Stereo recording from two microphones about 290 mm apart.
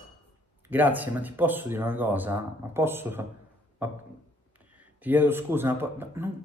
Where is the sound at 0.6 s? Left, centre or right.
Centre.